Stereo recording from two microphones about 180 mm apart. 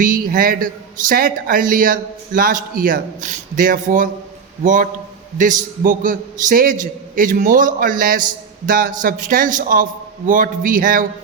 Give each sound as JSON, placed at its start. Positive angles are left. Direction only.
{"t": 0.0, "sound": "speech", "side_deg": -50}